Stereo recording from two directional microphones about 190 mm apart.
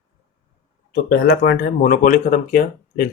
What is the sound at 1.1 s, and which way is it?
Speech, 55° left (ahead or behind).